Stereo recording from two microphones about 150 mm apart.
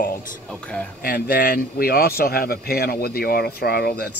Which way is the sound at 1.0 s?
90° left.